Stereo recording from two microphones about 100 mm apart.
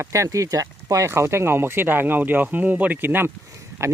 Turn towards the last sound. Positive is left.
turn(degrees=-30)  # may be behind; listen again after turning